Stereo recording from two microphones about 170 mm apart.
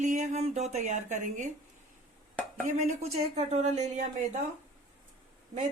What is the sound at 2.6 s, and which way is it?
Speech, 45° right (ahead or behind).